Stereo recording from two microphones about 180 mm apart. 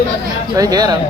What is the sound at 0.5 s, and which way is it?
Speech, 20° right (ahead or behind).